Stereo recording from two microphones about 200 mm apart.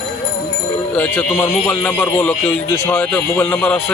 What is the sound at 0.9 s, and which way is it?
Speech, 5° left (ahead or behind).